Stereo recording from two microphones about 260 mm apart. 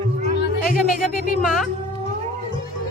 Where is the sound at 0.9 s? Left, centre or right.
Left.